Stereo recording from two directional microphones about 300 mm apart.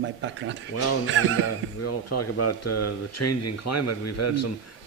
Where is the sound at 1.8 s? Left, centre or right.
Left.